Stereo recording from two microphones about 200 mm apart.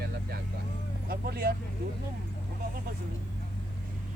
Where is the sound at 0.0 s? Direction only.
50° right (ahead or behind).